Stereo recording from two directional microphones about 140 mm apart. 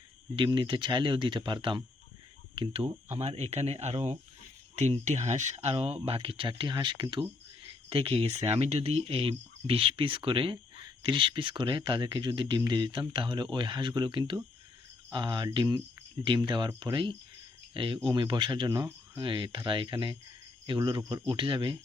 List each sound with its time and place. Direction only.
0.3 s speech: 35° right (ahead or behind)